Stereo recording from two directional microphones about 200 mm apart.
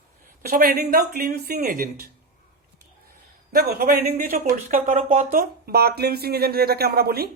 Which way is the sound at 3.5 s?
45° right (ahead or behind).